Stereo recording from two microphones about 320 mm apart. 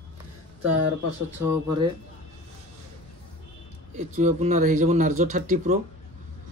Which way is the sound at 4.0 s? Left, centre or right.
Right.